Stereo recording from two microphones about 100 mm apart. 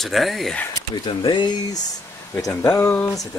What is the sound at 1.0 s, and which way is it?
Speech, 55° left (ahead or behind).